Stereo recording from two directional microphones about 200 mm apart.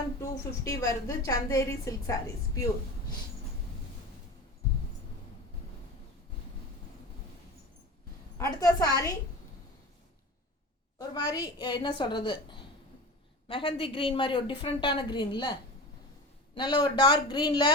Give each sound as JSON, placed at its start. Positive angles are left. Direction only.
{"t": 0.2, "sound": "a woman's voice", "side_deg": 15}
{"t": 8.4, "sound": "a woman's voice", "side_deg": 15}
{"t": 10.9, "sound": "a woman's voice", "side_deg": 20}
{"t": 16.6, "sound": "a woman's voice", "side_deg": 25}